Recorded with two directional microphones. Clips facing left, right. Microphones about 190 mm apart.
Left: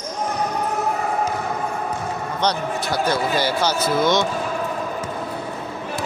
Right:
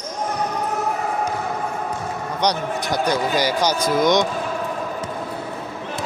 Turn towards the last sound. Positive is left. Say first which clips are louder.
# right 1 dB
turn(degrees=-15)  # may be behind; listen again after turning